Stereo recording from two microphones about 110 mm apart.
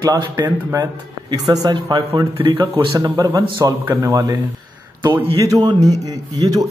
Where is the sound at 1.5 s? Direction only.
40° right (ahead or behind).